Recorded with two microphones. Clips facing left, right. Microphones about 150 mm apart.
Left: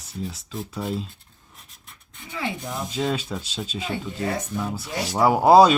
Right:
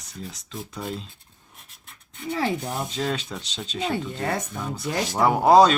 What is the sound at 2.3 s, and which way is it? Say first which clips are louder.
Speech: right 4 dB; 40° right (ahead or behind).